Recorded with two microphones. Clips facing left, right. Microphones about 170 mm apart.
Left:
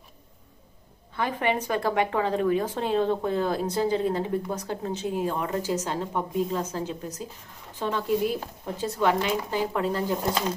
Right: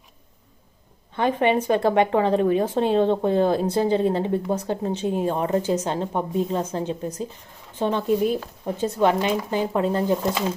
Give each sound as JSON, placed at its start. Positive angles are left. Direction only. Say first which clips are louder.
{"t": 1.1, "sound": "speech", "louder": "right 6 dB", "side_deg": -20}